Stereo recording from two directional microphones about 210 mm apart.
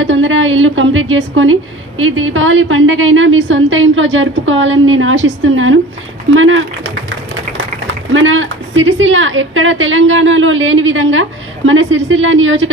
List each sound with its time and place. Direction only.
0.0 s a woman's voice: 65° right (ahead or behind)